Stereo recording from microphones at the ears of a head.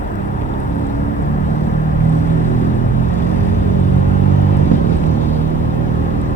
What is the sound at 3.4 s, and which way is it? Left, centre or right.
Vehicle, right.